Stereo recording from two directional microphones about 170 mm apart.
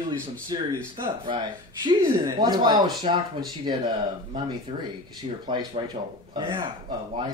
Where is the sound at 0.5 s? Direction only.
25° right (ahead or behind).